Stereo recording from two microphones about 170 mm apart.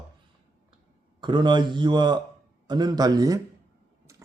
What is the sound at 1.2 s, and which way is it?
A man's voice, 25° right (ahead or behind).